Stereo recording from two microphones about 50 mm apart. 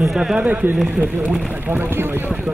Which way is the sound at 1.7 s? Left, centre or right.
Right.